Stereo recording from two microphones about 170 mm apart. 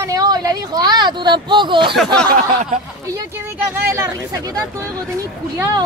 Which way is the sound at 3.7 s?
15° right (ahead or behind).